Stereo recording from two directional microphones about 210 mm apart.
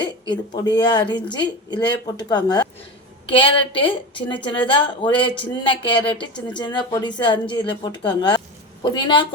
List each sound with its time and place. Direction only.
0.0 s a woman's voice: 20° left (ahead or behind)